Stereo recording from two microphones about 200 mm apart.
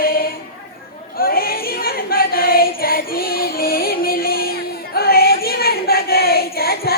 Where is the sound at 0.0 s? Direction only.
45° left (ahead or behind).